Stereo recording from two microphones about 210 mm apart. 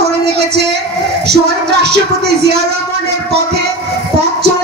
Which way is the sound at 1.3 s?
50° right (ahead or behind).